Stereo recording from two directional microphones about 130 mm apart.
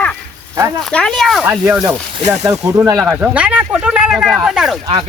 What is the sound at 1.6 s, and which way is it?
Speech, 15° right (ahead or behind).